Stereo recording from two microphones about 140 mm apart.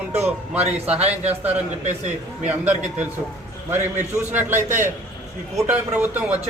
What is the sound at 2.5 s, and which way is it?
Speech, 10° right (ahead or behind).